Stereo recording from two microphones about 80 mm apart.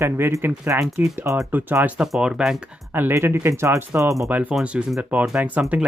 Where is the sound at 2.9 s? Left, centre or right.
Right.